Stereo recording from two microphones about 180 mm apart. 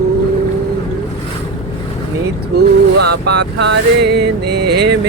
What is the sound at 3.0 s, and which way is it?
Vehicle, 65° right (ahead or behind).